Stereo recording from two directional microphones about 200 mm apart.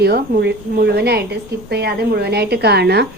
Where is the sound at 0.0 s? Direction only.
55° right (ahead or behind).